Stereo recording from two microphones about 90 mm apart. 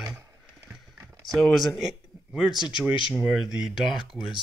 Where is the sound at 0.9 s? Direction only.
30° right (ahead or behind).